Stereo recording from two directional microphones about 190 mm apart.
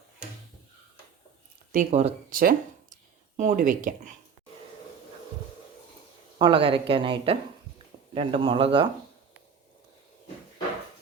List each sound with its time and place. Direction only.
1.7 s speech: 40° right (ahead or behind)
2.3 s speech: 45° right (ahead or behind)
6.4 s a woman's voice: 30° right (ahead or behind)